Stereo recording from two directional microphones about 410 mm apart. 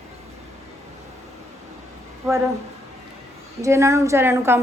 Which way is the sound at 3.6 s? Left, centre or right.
Centre.